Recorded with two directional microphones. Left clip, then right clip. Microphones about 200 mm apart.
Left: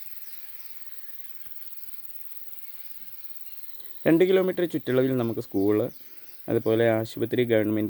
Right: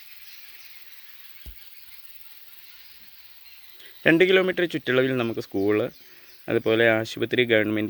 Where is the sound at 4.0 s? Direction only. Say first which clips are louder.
Right 2 dB; 5° left (ahead or behind).